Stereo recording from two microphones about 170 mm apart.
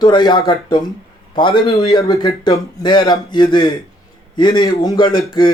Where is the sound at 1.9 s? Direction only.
25° left (ahead or behind).